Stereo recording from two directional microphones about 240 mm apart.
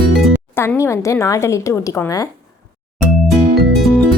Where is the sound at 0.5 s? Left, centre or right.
Centre.